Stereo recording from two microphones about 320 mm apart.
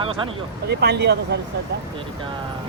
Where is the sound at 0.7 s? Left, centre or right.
Right.